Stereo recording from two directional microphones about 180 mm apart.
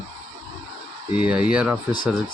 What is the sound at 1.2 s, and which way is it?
Speech, 5° right (ahead or behind).